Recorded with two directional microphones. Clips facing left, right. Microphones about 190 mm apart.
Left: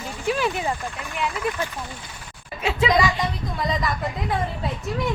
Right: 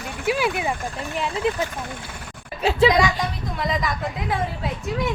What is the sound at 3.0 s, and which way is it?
Speech, centre (ahead or behind).